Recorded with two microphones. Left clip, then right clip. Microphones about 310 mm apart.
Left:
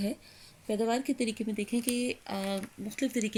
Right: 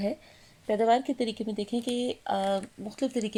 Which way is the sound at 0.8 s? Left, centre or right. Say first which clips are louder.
Right 6 dB; right.